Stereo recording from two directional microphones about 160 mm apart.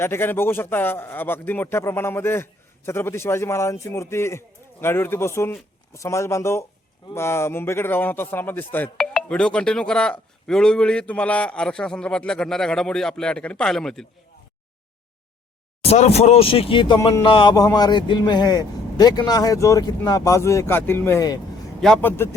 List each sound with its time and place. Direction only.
0.0 s a man's voice: 15° left (ahead or behind)
15.8 s speech: 40° left (ahead or behind); by 21.3 s 20° left (ahead or behind)
21.8 s a man's voice: 5° left (ahead or behind)